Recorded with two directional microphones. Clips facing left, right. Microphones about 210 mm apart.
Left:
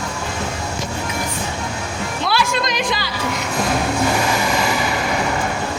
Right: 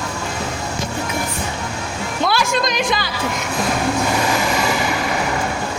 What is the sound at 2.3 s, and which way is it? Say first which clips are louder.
Music: right 1 dB; 45° right (ahead or behind).